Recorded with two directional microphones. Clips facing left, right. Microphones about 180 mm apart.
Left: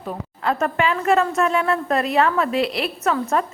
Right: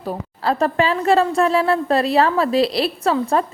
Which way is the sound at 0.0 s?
35° right (ahead or behind).